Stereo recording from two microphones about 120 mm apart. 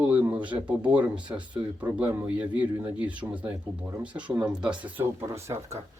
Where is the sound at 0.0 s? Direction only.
15° right (ahead or behind).